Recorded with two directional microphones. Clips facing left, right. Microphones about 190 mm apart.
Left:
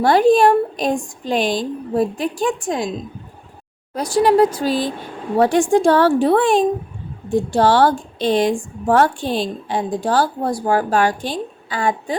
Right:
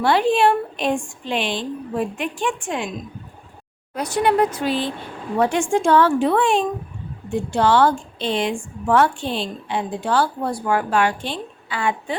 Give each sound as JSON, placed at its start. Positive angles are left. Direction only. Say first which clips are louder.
{"t": 0.0, "sound": "a woman's voice", "louder": "left 4 dB", "side_deg": 40}
{"t": 4.1, "sound": "a woman's voice", "louder": "left 5 dB", "side_deg": 35}